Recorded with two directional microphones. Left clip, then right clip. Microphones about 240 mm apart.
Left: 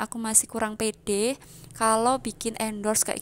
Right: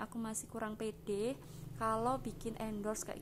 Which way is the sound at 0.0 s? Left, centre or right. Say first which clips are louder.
Left 15 dB; left.